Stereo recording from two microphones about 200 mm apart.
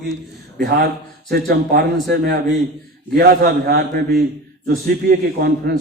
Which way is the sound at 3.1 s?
50° right (ahead or behind).